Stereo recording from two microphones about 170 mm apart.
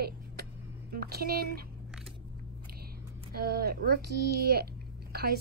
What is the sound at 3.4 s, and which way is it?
Speech, 65° right (ahead or behind).